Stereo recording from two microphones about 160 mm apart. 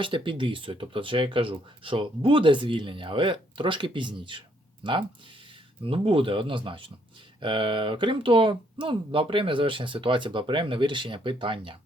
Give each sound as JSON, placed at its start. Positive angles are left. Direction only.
{"t": 0.0, "sound": "speech", "side_deg": -30}